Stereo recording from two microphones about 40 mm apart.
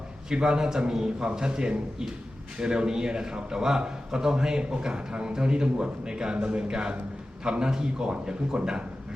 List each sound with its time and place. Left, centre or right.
0.3 s a man's voice: centre